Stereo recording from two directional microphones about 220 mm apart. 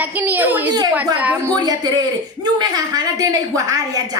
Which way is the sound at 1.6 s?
15° right (ahead or behind).